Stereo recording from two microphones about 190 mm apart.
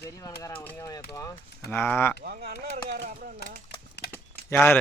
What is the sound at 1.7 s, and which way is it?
Speech, 10° left (ahead or behind).